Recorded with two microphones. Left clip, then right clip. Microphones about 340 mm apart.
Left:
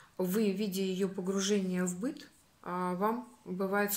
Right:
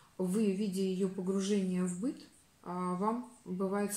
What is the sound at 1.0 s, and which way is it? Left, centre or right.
Speech, left.